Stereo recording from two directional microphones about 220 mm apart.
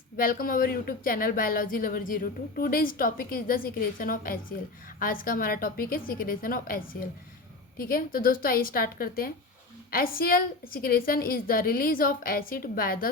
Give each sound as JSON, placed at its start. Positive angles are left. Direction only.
{"t": 0.2, "sound": "speech", "side_deg": 40}